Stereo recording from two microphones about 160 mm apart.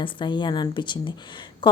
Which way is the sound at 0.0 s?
30° left (ahead or behind).